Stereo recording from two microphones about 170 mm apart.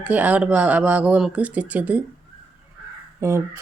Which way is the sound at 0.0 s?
10° right (ahead or behind).